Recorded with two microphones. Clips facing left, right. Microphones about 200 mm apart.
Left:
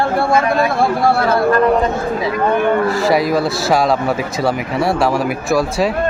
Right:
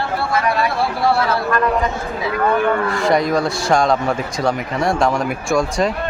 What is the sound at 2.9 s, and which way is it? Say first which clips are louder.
Speech: left 2 dB; 5° left (ahead or behind).